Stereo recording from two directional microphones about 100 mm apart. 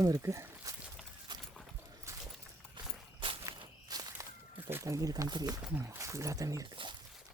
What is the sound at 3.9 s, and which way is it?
Walk, 40° right (ahead or behind).